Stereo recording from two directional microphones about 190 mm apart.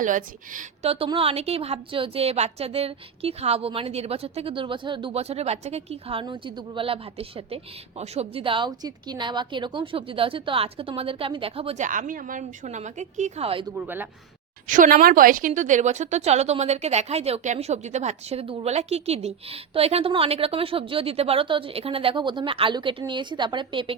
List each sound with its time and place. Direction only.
0.0 s a woman's voice: 45° right (ahead or behind); by 13.7 s 30° right (ahead or behind)
13.7 s speech: 10° right (ahead or behind)
14.7 s a woman's voice: 45° right (ahead or behind); by 23.9 s 25° right (ahead or behind)